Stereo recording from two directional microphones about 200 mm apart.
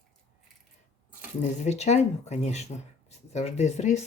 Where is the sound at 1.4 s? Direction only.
35° left (ahead or behind).